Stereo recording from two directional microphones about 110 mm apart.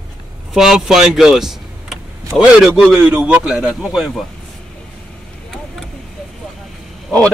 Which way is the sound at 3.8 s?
Centre (ahead or behind).